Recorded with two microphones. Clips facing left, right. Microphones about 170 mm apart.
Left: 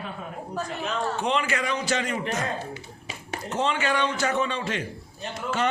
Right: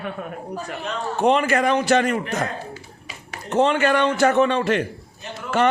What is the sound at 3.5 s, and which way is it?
A man's voice, 55° right (ahead or behind).